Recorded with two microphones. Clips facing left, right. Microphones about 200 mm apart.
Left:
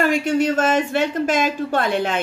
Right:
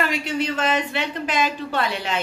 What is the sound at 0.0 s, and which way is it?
Speech, 50° left (ahead or behind).